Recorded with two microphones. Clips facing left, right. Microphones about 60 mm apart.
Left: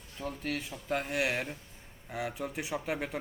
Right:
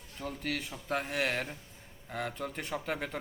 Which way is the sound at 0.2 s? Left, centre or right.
Centre.